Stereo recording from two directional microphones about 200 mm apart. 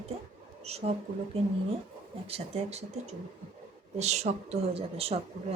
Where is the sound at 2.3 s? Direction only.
30° right (ahead or behind).